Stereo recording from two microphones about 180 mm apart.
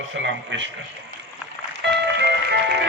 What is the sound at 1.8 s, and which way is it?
Music, 75° right (ahead or behind).